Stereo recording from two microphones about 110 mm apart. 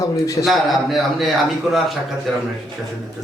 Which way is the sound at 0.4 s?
Centre (ahead or behind).